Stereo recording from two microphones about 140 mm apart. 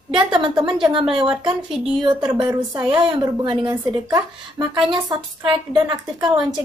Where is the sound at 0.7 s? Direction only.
35° right (ahead or behind).